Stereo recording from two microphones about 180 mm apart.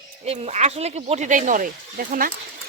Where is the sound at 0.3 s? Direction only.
40° right (ahead or behind).